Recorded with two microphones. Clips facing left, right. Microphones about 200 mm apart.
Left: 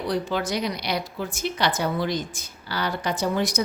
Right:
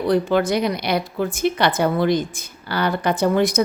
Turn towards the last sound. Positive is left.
turn(degrees=-55)  # may be behind; listen again after turning